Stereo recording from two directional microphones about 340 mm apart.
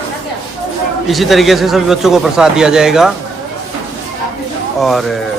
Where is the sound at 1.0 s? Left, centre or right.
Centre.